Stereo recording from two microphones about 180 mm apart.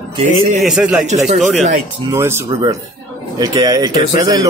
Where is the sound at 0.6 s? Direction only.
5° right (ahead or behind).